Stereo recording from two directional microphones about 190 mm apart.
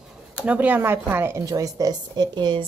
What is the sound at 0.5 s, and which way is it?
A woman's voice, 10° right (ahead or behind).